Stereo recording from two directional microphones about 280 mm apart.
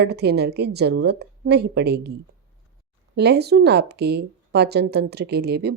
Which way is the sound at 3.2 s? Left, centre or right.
Right.